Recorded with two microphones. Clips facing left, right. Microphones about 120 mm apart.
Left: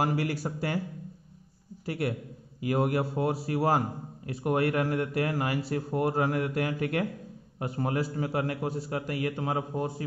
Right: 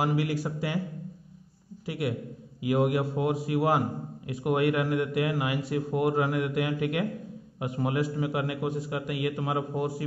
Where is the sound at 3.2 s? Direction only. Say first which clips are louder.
Right 2 dB; 35° left (ahead or behind).